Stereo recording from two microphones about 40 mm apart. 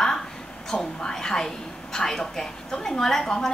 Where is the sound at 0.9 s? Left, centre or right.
Centre.